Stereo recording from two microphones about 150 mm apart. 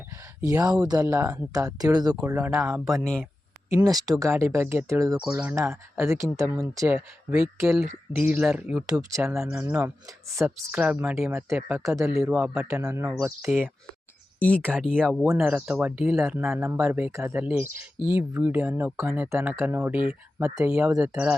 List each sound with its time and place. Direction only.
0.4 s speech: 25° right (ahead or behind); by 3.2 s 5° left (ahead or behind)
3.8 s speech: 25° right (ahead or behind); by 8.6 s 10° right (ahead or behind)
8.9 s speech: 20° right (ahead or behind)
9.3 s speech: 5° right (ahead or behind)
9.6 s speech: 15° right (ahead or behind)
12.1 s speech: 5° right (ahead or behind)
12.7 s speech: 15° right (ahead or behind)
14.3 s speech: 10° left (ahead or behind); by 21.3 s 10° right (ahead or behind)